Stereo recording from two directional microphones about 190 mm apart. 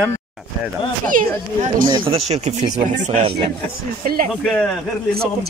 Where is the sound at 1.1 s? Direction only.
45° right (ahead or behind).